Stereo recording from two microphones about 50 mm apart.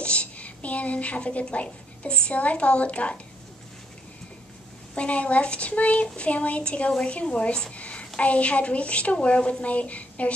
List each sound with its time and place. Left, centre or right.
0.0 s speech: left
4.9 s a woman's voice: left
7.7 s a sound: left
8.2 s a woman's voice: left